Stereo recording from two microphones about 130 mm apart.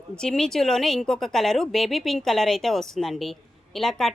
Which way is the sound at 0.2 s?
5° left (ahead or behind).